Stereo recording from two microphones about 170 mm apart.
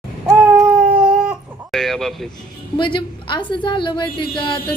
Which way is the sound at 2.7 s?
30° left (ahead or behind).